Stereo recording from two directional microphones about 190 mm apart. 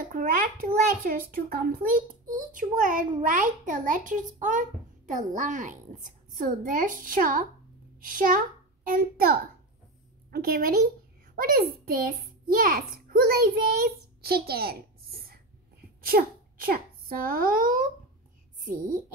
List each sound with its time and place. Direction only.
0.0 s a child's voice: 45° right (ahead or behind)